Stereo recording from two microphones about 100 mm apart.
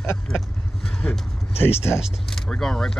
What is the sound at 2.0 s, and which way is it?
Speech, centre (ahead or behind).